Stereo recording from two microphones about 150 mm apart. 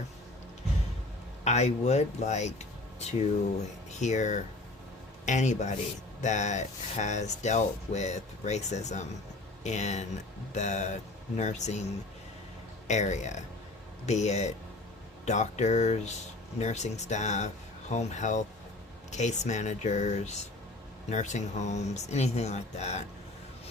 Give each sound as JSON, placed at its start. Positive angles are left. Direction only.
{"t": 1.5, "sound": "speech", "side_deg": 50}
{"t": 12.9, "sound": "speech", "side_deg": 50}